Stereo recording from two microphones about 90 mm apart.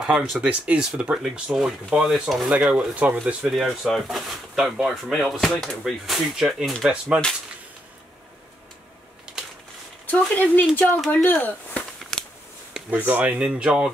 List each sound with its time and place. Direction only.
0.0 s speech: 5° right (ahead or behind)
2.5 s speech: 10° right (ahead or behind)
10.0 s speech: 20° left (ahead or behind)
12.0 s a sound: 5° left (ahead or behind)
13.0 s speech: 20° right (ahead or behind)